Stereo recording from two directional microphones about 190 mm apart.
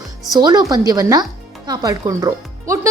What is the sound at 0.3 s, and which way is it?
A woman's voice, 20° right (ahead or behind).